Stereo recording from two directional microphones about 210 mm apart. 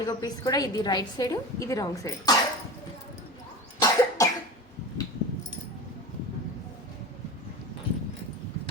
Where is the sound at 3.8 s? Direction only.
15° left (ahead or behind).